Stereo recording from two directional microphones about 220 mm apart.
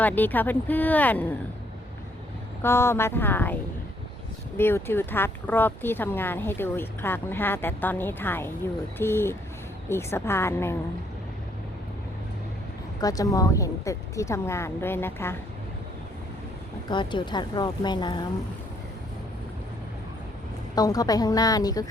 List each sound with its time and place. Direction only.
0.0 s speech: 10° left (ahead or behind)
2.6 s speech: 10° left (ahead or behind)
13.0 s speech: 15° left (ahead or behind)
16.9 s speech: 20° left (ahead or behind)
20.7 s speech: 15° left (ahead or behind)